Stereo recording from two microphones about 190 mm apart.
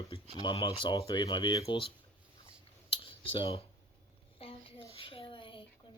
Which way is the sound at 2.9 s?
25° left (ahead or behind).